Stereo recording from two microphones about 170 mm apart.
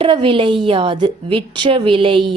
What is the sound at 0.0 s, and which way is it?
A woman's voice, 30° right (ahead or behind).